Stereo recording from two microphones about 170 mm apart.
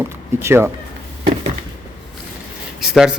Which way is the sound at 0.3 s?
15° right (ahead or behind).